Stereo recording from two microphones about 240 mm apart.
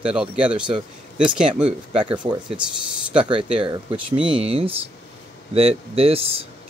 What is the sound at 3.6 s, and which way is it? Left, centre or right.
Speech, right.